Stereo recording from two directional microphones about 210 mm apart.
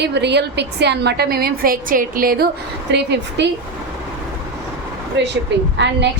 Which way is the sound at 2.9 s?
55° right (ahead or behind).